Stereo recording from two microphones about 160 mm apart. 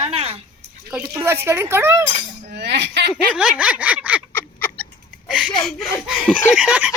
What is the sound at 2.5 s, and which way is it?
Speech, 90° right.